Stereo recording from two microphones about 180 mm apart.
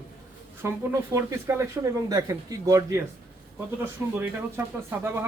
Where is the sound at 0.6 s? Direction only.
15° right (ahead or behind).